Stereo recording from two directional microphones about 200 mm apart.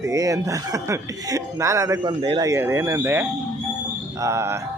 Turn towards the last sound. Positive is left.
turn(degrees=-15)  # may be behind; listen again after turning